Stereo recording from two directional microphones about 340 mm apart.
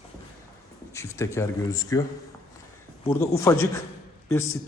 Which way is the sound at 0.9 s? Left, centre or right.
Centre.